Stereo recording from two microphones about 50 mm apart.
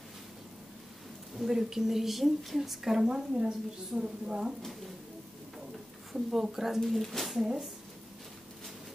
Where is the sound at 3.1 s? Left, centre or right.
Right.